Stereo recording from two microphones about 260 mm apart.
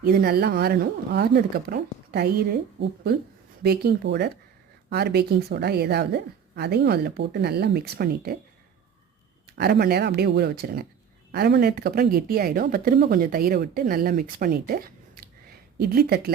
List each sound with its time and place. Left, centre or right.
0.0 s speech: right
9.6 s speech: right